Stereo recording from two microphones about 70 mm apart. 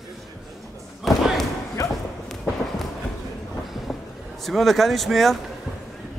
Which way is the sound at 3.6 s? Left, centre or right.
Centre.